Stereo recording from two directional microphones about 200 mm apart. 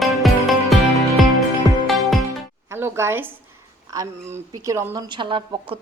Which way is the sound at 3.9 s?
15° right (ahead or behind).